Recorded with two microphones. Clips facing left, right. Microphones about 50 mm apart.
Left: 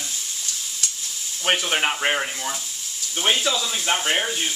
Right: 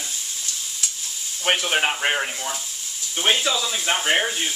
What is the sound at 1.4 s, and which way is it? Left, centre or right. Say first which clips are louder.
Speech: right 1 dB; centre.